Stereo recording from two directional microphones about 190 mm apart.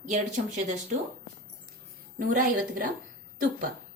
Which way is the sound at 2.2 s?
45° right (ahead or behind).